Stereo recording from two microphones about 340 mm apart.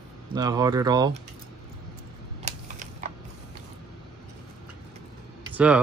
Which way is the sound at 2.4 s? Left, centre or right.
Centre.